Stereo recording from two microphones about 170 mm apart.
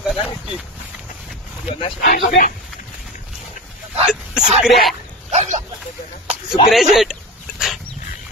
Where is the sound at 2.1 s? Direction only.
50° left (ahead or behind).